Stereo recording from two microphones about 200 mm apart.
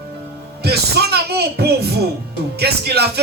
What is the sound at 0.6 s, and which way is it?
Speech, 55° right (ahead or behind).